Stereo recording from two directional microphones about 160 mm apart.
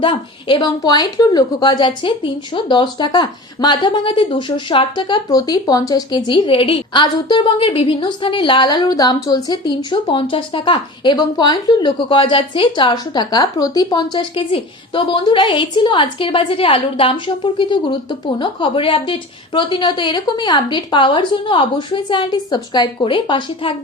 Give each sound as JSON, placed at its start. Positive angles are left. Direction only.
{"t": 0.0, "sound": "a woman's voice", "side_deg": 30}